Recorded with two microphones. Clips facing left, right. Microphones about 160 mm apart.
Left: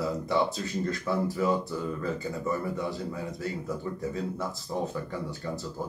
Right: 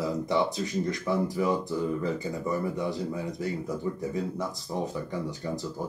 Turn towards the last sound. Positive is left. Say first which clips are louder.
# right 2 dB
turn(degrees=-20)  # may be behind; listen again after turning